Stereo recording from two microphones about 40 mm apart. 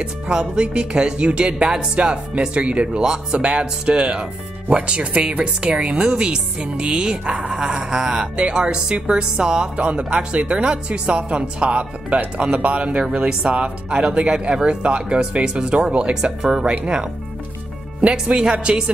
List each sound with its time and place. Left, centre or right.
0.0 s speech: centre
3.0 s speech: centre
6.9 s music: centre
8.4 s speech: right
18.0 s speech: centre